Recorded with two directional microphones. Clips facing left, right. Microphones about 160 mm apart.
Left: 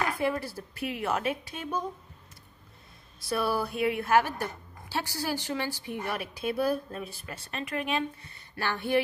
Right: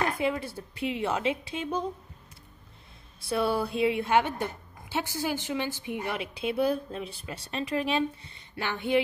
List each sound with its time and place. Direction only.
0.0 s a woman's voice: 25° right (ahead or behind)
3.3 s a woman's voice: 25° right (ahead or behind)